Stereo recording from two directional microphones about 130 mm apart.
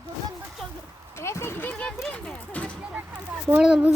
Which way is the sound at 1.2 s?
20° left (ahead or behind).